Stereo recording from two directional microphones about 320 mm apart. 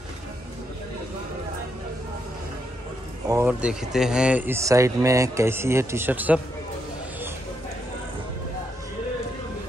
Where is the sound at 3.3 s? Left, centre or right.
Centre.